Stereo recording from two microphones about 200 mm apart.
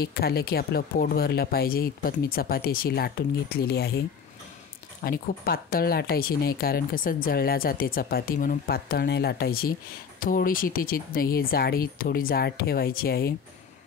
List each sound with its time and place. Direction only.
0.0 s speech: 50° left (ahead or behind)
5.0 s speech: 50° left (ahead or behind)